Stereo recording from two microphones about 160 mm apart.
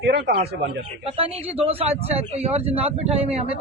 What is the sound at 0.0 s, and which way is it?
Speech, 85° right.